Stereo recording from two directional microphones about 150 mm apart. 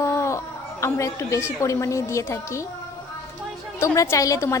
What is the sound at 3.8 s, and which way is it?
Speech, 20° left (ahead or behind).